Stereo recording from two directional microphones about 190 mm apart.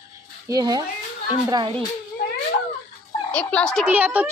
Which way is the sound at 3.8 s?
10° right (ahead or behind).